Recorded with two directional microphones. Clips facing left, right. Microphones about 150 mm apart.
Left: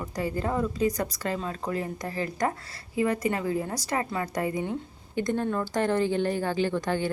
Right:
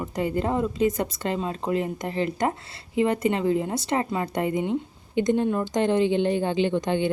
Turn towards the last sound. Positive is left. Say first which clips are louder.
# right 4 dB
turn(degrees=-20)  # may be behind; listen again after turning